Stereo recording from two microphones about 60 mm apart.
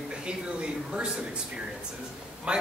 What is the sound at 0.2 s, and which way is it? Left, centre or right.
Speech, centre.